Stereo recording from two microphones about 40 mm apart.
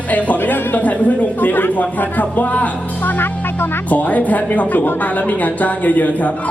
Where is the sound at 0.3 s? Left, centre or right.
Left.